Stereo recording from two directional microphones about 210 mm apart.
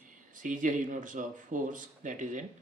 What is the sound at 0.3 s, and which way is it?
Speech, 40° right (ahead or behind).